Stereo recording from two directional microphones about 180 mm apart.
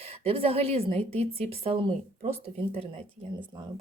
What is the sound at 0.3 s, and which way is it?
A woman's voice, 30° right (ahead or behind).